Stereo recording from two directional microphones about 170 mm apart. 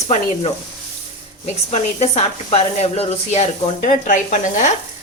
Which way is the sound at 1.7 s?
40° left (ahead or behind).